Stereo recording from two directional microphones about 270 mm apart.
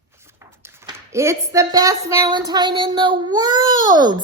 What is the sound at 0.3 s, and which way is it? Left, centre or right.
A woman's voice, centre.